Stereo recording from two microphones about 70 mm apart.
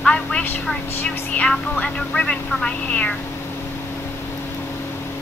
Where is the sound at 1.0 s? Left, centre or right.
Centre.